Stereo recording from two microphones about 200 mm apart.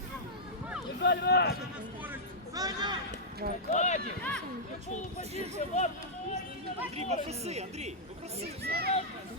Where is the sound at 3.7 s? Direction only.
35° left (ahead or behind).